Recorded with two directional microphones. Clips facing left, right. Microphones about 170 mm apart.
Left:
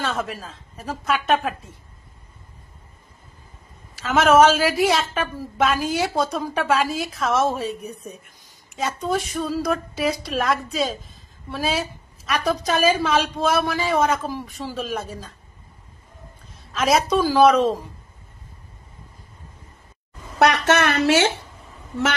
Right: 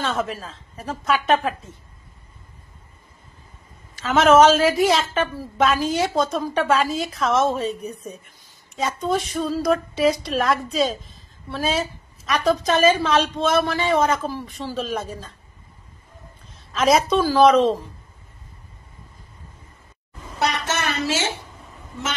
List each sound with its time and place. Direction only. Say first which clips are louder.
0.0 s a woman's voice: right 2 dB; 5° left (ahead or behind)
3.9 s a woman's voice: right 1 dB; 5° left (ahead or behind)
16.7 s a woman's voice: right 1 dB; centre (ahead or behind)
20.3 s a woman's voice: left 7 dB; 65° left (ahead or behind)